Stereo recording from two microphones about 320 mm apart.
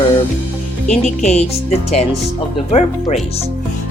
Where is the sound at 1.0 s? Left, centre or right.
Left.